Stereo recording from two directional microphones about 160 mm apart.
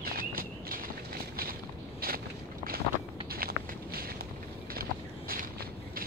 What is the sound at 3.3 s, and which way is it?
Walk, 70° right (ahead or behind).